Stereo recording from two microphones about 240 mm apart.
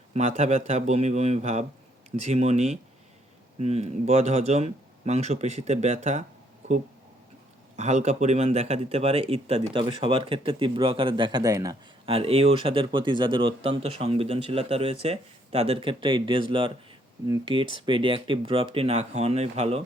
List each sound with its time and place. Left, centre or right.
0.1 s speech: right
7.8 s speech: right